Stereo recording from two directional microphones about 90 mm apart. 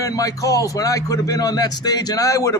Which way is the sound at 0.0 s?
40° left (ahead or behind).